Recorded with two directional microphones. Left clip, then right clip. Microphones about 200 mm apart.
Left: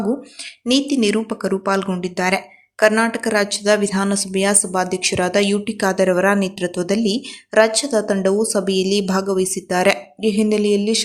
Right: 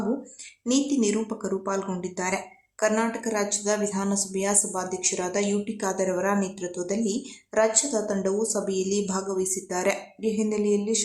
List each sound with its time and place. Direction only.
0.6 s speech: 20° left (ahead or behind)